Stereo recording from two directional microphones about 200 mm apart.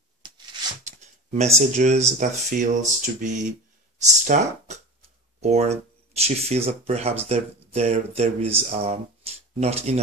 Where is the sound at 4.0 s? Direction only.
35° right (ahead or behind).